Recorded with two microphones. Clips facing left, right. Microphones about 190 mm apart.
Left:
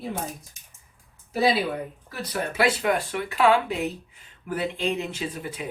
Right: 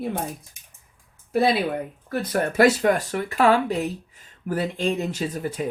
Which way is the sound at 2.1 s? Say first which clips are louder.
Right 7 dB; 50° right (ahead or behind).